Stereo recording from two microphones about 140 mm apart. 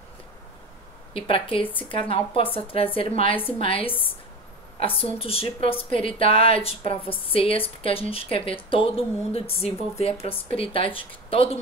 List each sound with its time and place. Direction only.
1.1 s speech: 40° left (ahead or behind)